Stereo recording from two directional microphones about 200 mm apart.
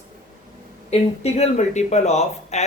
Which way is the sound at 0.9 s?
30° left (ahead or behind).